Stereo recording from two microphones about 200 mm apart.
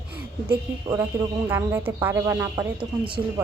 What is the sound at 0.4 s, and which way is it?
Speech, 15° right (ahead or behind).